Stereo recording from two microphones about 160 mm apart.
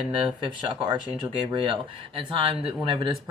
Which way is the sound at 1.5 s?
35° right (ahead or behind).